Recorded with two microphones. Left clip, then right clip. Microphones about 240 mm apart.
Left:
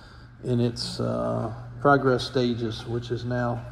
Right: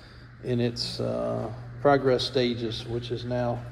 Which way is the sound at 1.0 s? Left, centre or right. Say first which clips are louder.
Left 2 dB; left.